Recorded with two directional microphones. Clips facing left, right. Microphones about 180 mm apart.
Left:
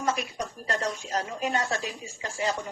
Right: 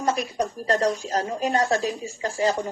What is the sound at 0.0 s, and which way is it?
Speech, 35° right (ahead or behind).